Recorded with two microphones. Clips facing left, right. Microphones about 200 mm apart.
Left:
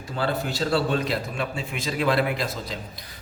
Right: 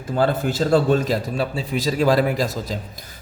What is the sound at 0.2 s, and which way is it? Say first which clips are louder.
A man's voice: right 6 dB; 50° right (ahead or behind).